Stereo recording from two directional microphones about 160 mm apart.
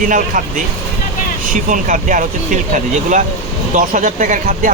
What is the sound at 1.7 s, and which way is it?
Speech, 55° right (ahead or behind).